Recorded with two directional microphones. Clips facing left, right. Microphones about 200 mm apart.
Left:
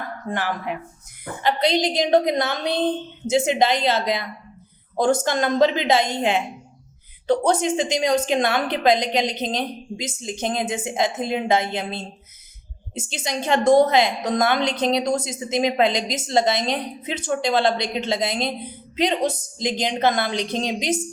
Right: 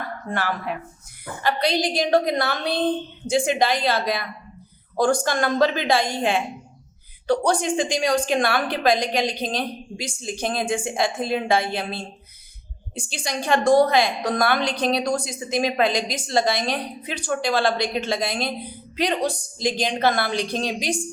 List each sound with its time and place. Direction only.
0.3 s a woman's voice: 15° left (ahead or behind)